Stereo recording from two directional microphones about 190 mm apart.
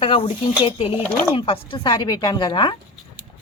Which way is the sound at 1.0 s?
5° left (ahead or behind).